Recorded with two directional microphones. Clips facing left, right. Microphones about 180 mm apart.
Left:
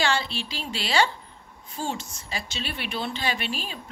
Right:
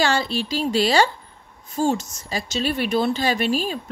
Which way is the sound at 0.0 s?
40° right (ahead or behind).